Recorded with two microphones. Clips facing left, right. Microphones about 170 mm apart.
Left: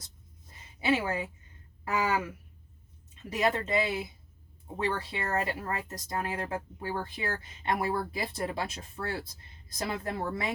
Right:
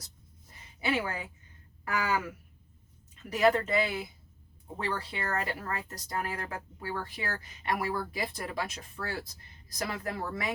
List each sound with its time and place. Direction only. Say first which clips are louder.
0.8 s speech: left 3 dB; 25° left (ahead or behind)